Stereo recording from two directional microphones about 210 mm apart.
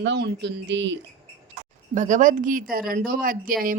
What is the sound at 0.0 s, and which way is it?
Speech, 55° right (ahead or behind).